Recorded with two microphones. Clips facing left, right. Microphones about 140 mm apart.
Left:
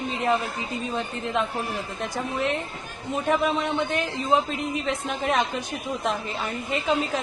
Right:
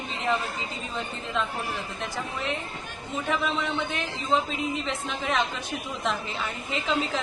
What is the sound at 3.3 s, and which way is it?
Speech, 50° left (ahead or behind).